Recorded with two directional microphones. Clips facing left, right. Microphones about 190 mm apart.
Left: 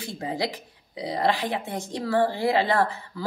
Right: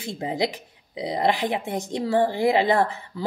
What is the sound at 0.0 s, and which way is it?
A woman's voice, 20° right (ahead or behind).